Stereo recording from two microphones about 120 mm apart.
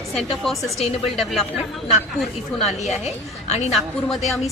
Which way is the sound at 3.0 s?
65° left (ahead or behind).